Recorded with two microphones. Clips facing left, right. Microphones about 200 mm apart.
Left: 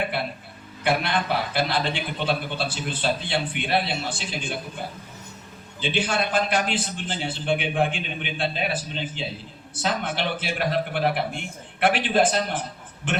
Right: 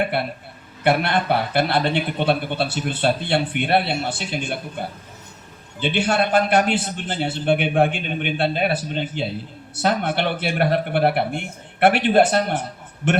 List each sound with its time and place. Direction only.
0.9 s speech: 60° right (ahead or behind)
5.8 s speech: 60° right (ahead or behind)